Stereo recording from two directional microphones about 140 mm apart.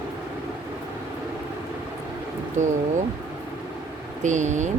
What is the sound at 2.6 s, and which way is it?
Speech, 60° right (ahead or behind).